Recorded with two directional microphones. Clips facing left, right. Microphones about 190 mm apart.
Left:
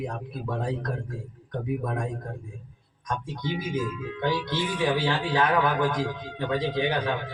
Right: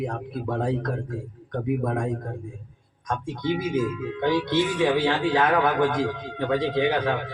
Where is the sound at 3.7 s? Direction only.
25° right (ahead or behind).